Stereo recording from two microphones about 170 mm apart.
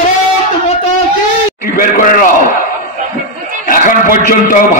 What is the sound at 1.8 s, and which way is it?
Speech, 55° left (ahead or behind).